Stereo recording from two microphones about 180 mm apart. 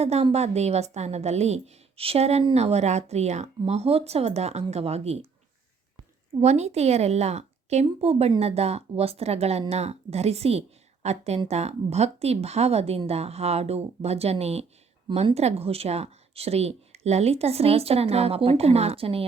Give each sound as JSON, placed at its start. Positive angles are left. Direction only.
{"t": 0.0, "sound": "speech", "side_deg": -35}
{"t": 6.4, "sound": "speech", "side_deg": -40}